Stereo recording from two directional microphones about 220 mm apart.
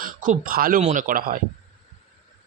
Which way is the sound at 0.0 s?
40° right (ahead or behind).